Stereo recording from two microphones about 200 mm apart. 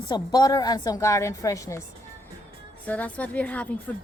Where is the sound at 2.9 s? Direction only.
5° left (ahead or behind).